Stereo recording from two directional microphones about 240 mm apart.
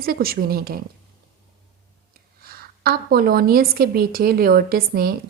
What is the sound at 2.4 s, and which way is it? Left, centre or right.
A woman's voice, right.